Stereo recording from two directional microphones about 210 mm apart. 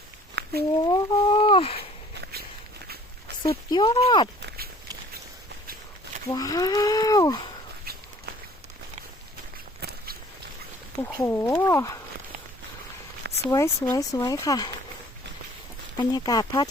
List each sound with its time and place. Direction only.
0.4 s a sound: 50° right (ahead or behind)
0.9 s a sound: 20° left (ahead or behind)
2.8 s walk: 45° right (ahead or behind)
3.4 s speech: 20° left (ahead or behind)
4.4 s walk: 45° right (ahead or behind)
6.3 s speech: 15° left (ahead or behind)
11.0 s speech: 10° left (ahead or behind)
13.5 s speech: 15° left (ahead or behind)
16.0 s speech: 20° left (ahead or behind)